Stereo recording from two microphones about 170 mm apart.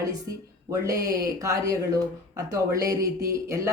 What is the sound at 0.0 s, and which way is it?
Speech, 20° right (ahead or behind).